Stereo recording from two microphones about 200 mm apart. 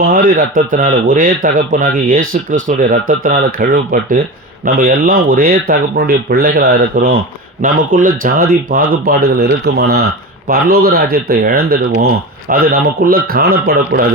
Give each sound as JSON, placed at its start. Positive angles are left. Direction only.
{"t": 0.0, "sound": "speech", "side_deg": -45}